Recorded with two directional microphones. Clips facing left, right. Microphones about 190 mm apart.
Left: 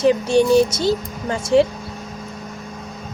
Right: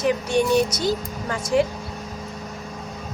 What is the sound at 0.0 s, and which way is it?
A child's voice, 30° left (ahead or behind).